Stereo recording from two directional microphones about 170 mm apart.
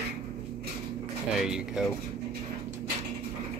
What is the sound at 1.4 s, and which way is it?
Speech, 5° right (ahead or behind).